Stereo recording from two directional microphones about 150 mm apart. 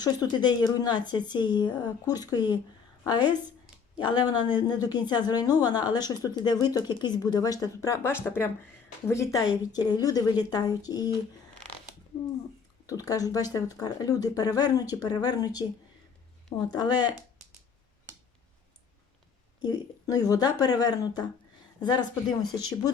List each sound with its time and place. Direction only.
0.0 s a woman's voice: 25° left (ahead or behind)
12.9 s a woman's voice: 25° left (ahead or behind)
16.7 s a woman's voice: 30° left (ahead or behind)
19.6 s a woman's voice: 25° left (ahead or behind)